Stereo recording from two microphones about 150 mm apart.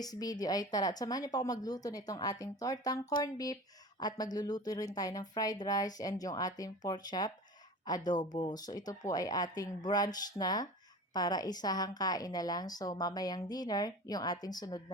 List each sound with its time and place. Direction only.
0.0 s a woman's voice: 25° left (ahead or behind)